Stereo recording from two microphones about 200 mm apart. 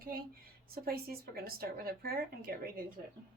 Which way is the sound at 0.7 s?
50° right (ahead or behind).